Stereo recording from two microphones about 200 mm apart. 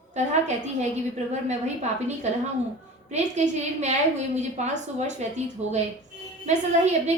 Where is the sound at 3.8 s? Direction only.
35° right (ahead or behind).